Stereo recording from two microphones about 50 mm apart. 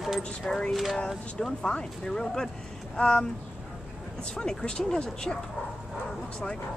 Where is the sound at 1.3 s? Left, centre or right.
Centre.